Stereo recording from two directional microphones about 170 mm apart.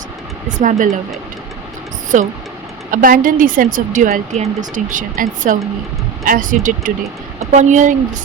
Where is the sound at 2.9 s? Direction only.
55° right (ahead or behind).